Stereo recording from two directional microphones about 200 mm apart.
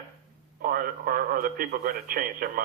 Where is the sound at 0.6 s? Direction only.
50° right (ahead or behind).